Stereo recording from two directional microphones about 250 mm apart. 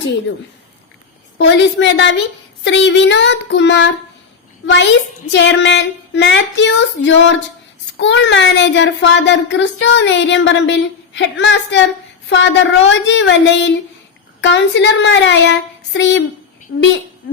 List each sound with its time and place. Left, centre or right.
1.5 s a child's voice: left